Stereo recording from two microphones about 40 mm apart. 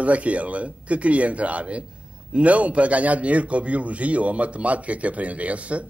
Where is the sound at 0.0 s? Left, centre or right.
Right.